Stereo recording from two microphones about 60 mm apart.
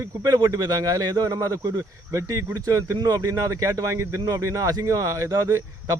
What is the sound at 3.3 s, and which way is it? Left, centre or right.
Speech, right.